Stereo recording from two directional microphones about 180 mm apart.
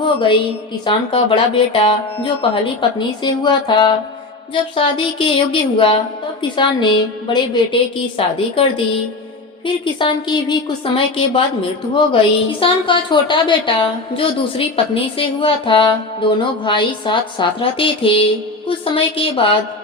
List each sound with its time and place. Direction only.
0.0 s a woman's voice: 30° left (ahead or behind)
9.8 s a woman's voice: 25° left (ahead or behind)